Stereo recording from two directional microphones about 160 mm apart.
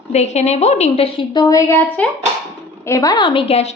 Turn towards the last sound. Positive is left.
turn(degrees=40)  # may be behind; listen again after turning